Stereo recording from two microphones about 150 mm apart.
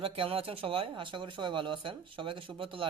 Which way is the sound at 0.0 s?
35° right (ahead or behind).